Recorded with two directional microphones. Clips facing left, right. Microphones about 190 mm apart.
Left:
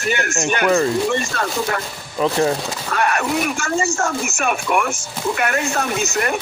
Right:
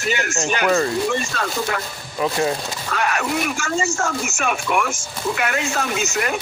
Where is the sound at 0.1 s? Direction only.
55° left (ahead or behind).